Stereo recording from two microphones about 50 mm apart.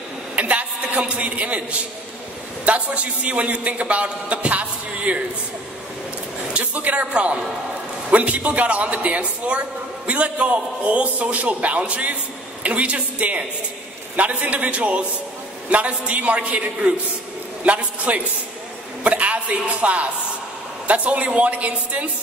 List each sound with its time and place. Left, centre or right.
0.4 s a man's voice: right
6.5 s a man's voice: right